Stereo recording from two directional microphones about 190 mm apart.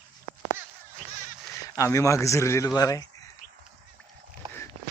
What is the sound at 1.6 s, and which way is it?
Speech, 15° left (ahead or behind).